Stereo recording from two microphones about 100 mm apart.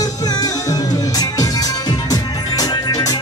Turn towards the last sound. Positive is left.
turn(degrees=40)  # may be behind; listen again after turning